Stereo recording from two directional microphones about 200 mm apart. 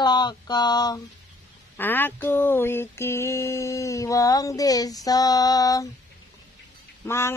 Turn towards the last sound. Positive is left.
turn(degrees=10)  # may be behind; listen again after turning